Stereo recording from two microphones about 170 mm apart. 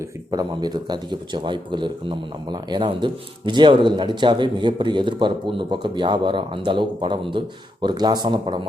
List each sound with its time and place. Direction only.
0.3 s speech: 25° right (ahead or behind)